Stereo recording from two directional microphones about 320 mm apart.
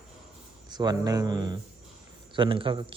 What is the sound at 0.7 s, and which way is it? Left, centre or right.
A man's voice, centre.